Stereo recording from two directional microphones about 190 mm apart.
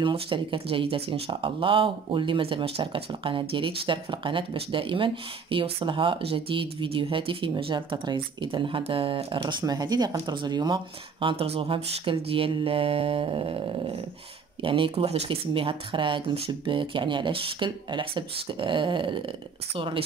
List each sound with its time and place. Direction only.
0.0 s speech: 25° right (ahead or behind)